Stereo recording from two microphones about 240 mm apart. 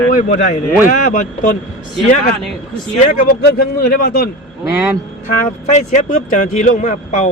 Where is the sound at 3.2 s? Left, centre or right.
Left.